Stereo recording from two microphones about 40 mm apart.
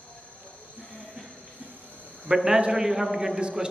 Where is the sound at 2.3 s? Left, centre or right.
Centre.